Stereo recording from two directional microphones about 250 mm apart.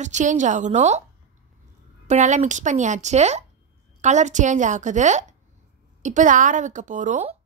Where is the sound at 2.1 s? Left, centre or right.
Right.